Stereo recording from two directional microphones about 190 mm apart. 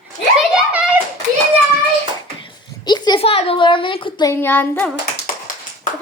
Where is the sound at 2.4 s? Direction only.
20° left (ahead or behind).